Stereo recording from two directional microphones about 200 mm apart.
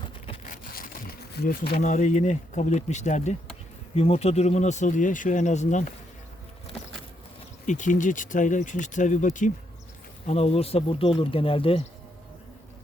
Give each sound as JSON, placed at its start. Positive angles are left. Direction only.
{"t": 0.4, "sound": "speech", "side_deg": 45}
{"t": 7.7, "sound": "speech", "side_deg": 40}